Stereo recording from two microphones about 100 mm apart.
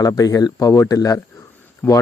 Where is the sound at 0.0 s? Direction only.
40° left (ahead or behind).